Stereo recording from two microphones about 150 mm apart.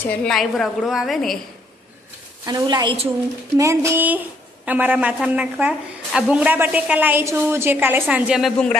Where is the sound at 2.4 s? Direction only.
25° right (ahead or behind); by 8.5 s 5° right (ahead or behind).